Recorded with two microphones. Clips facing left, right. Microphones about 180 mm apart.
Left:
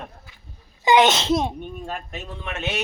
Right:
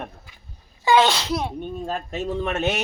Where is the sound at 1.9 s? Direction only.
35° right (ahead or behind).